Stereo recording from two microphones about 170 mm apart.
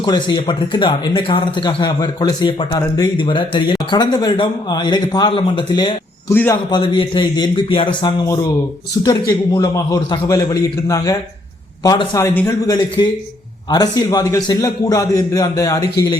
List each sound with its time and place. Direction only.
0.0 s speech: 25° left (ahead or behind)
6.3 s a man's voice: 10° left (ahead or behind)
6.7 s speech: 30° left (ahead or behind)
8.0 s a man's voice: 20° left (ahead or behind)